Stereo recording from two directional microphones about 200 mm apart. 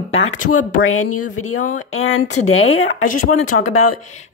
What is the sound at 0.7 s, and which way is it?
Speech, 90° left.